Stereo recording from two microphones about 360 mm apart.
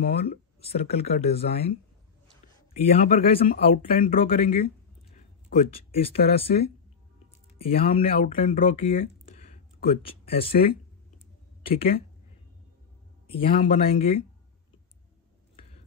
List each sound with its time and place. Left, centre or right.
0.0 s speech: left
3.1 s speech: left
9.3 s a sound: centre
11.6 s speech: centre
13.3 s speech: centre